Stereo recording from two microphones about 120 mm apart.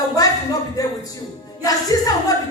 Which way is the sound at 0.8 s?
30° left (ahead or behind).